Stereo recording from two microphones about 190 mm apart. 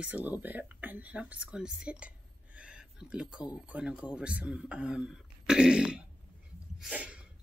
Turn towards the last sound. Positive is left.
turn(degrees=-5)  # may be behind; listen again after turning